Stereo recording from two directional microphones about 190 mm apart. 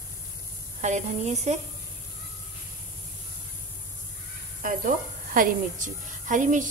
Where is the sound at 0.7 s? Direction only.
40° right (ahead or behind).